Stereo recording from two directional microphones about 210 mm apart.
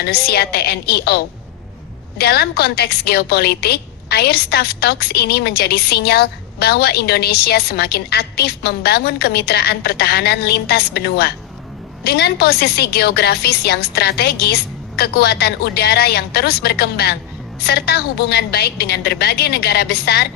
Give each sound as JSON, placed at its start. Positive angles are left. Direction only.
{"t": 0.0, "sound": "a woman's voice", "side_deg": 50}